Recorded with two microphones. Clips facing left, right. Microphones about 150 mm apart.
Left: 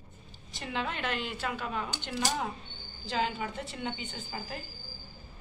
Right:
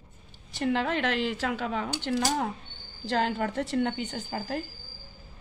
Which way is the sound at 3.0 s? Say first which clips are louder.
Right 5 dB; 70° right (ahead or behind).